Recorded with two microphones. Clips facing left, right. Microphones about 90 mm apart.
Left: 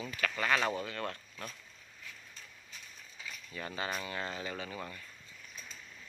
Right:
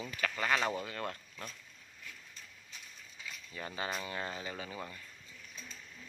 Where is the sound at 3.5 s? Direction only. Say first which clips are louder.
Left 1 dB; 20° right (ahead or behind).